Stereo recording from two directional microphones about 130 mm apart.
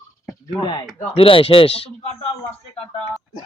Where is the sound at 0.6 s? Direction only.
40° left (ahead or behind).